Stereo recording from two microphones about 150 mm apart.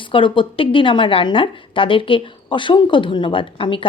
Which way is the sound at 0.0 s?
35° left (ahead or behind).